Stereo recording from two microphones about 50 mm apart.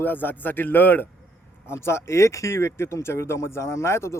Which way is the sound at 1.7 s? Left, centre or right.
Left.